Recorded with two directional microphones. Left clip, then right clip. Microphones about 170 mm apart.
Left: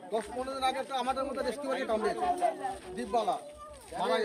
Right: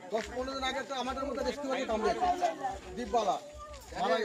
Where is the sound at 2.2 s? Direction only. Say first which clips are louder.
Even; 40° left (ahead or behind).